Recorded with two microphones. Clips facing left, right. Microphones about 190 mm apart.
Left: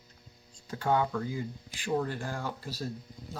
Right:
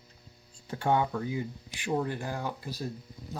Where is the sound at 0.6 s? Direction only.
25° right (ahead or behind).